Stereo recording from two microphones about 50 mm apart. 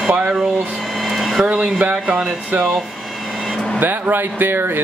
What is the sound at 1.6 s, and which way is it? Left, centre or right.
Speech, right.